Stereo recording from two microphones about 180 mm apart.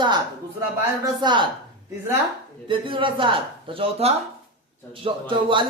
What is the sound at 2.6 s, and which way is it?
Speech, 30° right (ahead or behind).